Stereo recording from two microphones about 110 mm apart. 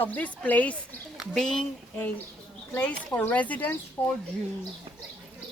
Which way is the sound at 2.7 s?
15° left (ahead or behind).